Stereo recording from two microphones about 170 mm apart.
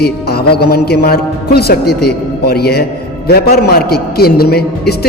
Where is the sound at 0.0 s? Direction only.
70° left (ahead or behind).